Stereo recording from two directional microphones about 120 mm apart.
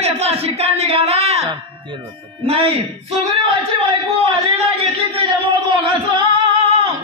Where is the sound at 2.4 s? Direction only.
55° right (ahead or behind).